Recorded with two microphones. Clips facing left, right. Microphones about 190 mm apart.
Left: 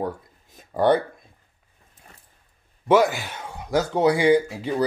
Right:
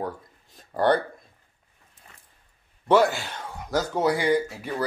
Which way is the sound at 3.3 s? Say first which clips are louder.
Left 2 dB; 15° left (ahead or behind).